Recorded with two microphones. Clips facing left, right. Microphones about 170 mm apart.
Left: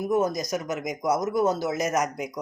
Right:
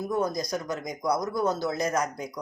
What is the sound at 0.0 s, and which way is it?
Speech, 20° left (ahead or behind).